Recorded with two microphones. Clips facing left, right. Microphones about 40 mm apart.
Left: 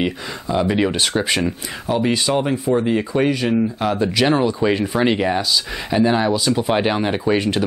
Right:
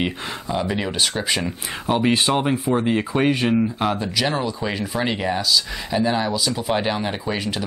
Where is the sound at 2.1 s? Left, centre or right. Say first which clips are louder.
Left 1 dB; right.